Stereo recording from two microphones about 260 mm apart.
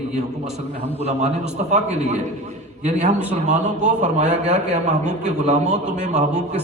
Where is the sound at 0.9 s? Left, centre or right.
Right.